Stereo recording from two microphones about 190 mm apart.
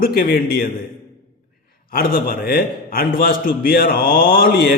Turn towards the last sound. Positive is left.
turn(degrees=50)  # may be behind; listen again after turning